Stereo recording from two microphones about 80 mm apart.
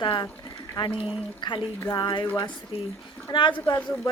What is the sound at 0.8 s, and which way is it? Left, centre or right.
A woman's voice, left.